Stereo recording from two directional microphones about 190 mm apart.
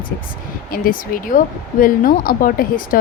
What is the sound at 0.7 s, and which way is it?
Speech, 50° left (ahead or behind).